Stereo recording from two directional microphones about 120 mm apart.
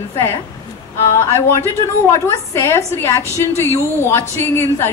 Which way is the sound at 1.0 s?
25° left (ahead or behind).